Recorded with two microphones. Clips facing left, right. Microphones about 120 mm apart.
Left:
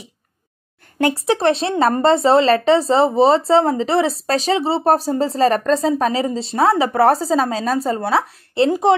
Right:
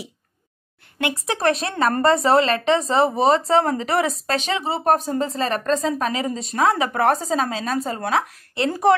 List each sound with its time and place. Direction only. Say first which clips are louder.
1.0 s speech: left 5 dB; 30° left (ahead or behind)
8.6 s speech: left 2 dB; 20° left (ahead or behind)